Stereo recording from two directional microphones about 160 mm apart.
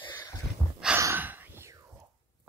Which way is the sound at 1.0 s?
15° right (ahead or behind).